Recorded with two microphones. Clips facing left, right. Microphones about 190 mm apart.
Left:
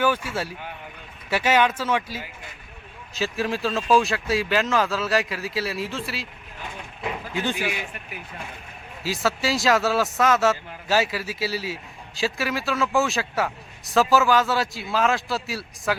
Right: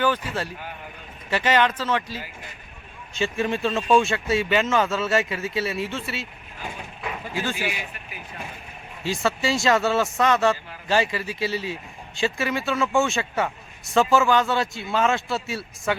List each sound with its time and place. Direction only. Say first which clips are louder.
0.0 s a man's voice: even; 10° left (ahead or behind)
9.0 s a man's voice: right 1 dB; centre (ahead or behind)